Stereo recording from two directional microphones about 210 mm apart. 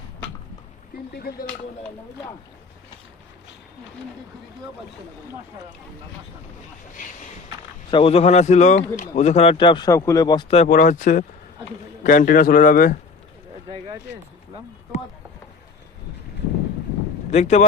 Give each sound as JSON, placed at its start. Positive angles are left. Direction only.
{"t": 1.1, "sound": "speech", "side_deg": 50}
{"t": 7.9, "sound": "a man's voice", "side_deg": 25}
{"t": 17.3, "sound": "a man's voice", "side_deg": 35}